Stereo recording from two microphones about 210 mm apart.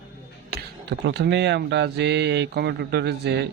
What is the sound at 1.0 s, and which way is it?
Speech, 55° right (ahead or behind).